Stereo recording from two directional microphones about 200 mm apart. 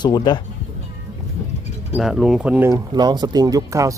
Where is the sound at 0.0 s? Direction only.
20° left (ahead or behind).